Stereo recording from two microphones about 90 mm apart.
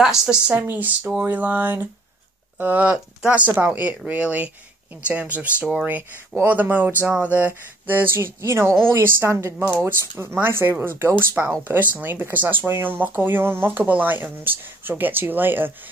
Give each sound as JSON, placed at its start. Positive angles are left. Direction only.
{"t": 0.0, "sound": "speech", "side_deg": -5}
{"t": 0.5, "sound": "speech", "side_deg": -20}